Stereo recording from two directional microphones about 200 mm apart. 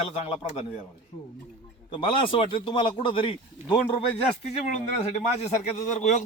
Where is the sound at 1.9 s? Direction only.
25° left (ahead or behind).